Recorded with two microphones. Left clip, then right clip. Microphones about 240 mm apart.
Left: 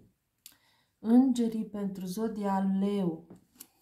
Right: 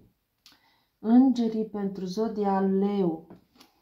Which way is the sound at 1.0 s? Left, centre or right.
Left.